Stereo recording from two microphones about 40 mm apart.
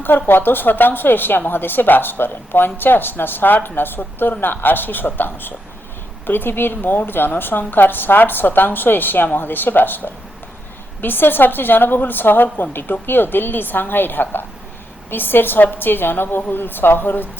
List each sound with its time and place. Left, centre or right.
0.3 s speech: left